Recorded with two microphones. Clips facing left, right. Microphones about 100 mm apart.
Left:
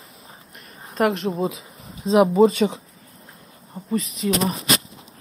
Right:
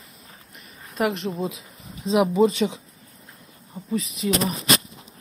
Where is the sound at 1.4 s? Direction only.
Centre (ahead or behind).